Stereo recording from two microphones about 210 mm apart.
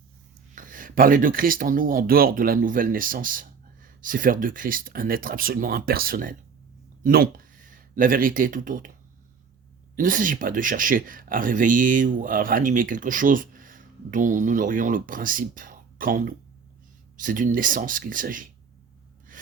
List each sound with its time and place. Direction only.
0.5 s speech: 40° right (ahead or behind)
9.9 s speech: 40° right (ahead or behind)